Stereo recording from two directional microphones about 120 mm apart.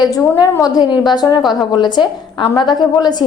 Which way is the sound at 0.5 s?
30° left (ahead or behind).